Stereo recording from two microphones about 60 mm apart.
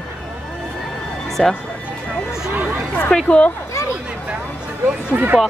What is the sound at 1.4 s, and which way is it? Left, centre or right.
Speech, centre.